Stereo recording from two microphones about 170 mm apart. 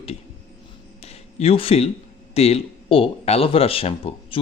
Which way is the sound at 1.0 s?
40° left (ahead or behind).